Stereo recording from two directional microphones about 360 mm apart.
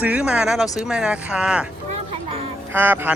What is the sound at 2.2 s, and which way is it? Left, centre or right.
Music, centre.